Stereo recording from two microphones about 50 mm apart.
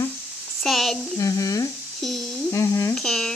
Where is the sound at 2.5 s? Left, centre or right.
Left.